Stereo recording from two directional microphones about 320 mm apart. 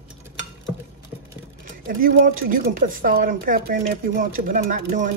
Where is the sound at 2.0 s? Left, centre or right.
Right.